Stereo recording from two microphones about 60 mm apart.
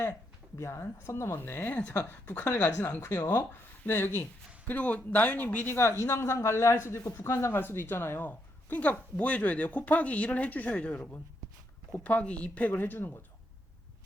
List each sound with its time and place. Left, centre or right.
0.6 s speech: left
1.4 s speech: left
1.8 s speech: left
2.0 s speech: left
3.1 s speech: left
4.6 s speech: left
5.7 s speech: left
7.6 s speech: left
12.7 s speech: left